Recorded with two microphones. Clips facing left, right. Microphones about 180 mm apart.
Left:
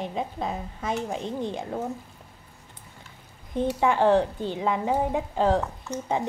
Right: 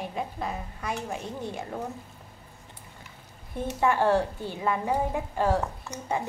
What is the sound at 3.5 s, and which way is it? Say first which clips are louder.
A woman's voice: left 2 dB; 20° left (ahead or behind).